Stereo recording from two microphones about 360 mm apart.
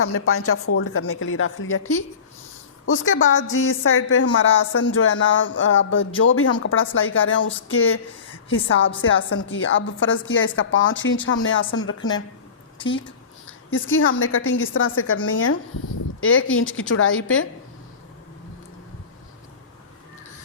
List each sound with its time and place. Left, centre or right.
0.0 s a woman's voice: left
2.8 s a woman's voice: left
12.8 s a woman's voice: centre
13.7 s a woman's voice: left